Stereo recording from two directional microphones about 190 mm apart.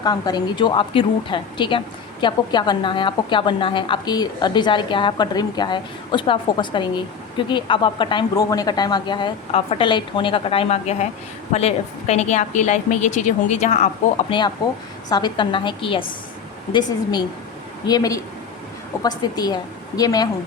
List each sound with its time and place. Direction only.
0.0 s a woman's voice: 20° left (ahead or behind)